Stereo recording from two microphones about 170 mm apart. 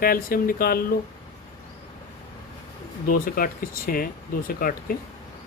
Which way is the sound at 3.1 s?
55° left (ahead or behind).